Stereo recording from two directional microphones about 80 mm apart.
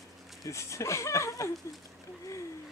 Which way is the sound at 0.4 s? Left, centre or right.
Left.